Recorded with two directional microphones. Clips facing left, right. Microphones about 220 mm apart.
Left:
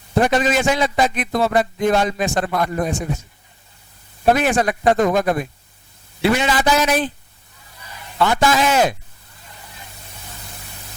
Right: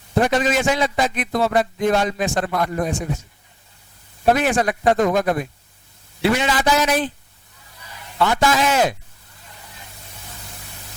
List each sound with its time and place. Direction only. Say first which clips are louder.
0.1 s a man's voice: left 1 dB; 20° left (ahead or behind)
4.3 s a man's voice: left 1 dB; 20° left (ahead or behind)